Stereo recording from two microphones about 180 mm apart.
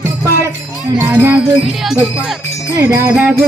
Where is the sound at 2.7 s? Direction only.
15° right (ahead or behind).